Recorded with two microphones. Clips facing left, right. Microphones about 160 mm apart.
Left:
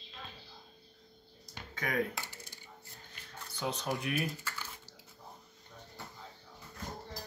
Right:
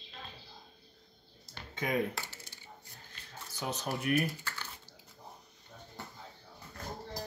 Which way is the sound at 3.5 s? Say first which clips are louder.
Left 1 dB; 10° right (ahead or behind).